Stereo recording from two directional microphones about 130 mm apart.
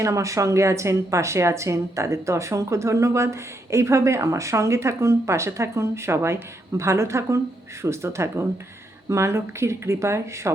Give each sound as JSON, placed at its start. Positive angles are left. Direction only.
{"t": 0.0, "sound": "speech", "side_deg": -25}